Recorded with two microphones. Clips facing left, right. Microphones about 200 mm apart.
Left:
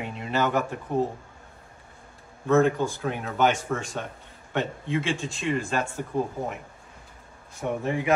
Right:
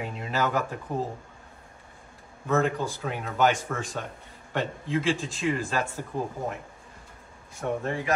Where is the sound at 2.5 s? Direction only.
Centre (ahead or behind).